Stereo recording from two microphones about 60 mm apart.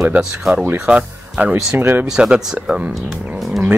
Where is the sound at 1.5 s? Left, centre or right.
Right.